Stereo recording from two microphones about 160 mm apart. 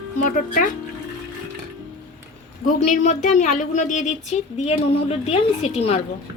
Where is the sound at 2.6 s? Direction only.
50° left (ahead or behind).